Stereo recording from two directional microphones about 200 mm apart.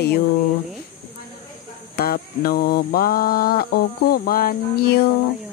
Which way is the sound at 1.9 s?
50° left (ahead or behind).